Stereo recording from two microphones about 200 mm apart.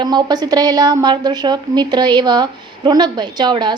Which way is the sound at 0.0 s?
20° right (ahead or behind).